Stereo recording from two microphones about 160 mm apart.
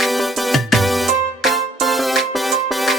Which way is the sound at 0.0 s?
Centre (ahead or behind).